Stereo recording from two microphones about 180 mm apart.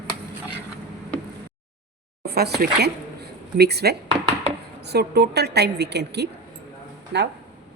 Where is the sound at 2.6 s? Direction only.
65° right (ahead or behind).